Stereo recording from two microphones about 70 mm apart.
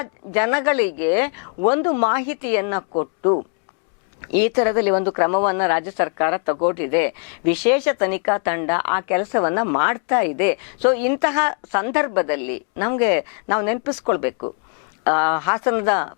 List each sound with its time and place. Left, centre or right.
0.0 s speech: left
4.3 s speech: centre